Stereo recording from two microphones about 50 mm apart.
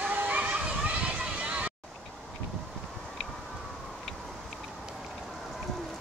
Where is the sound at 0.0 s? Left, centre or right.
Right.